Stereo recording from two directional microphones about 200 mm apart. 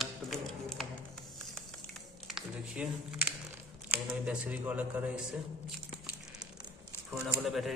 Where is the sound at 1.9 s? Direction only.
Centre (ahead or behind).